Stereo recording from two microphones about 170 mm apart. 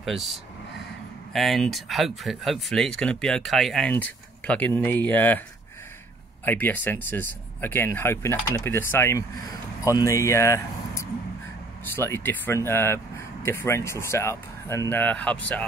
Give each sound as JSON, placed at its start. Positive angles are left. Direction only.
{"t": 0.0, "sound": "speech", "side_deg": 0}
{"t": 6.4, "sound": "speech", "side_deg": 10}